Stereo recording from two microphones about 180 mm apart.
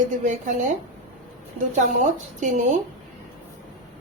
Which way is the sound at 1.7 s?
45° right (ahead or behind).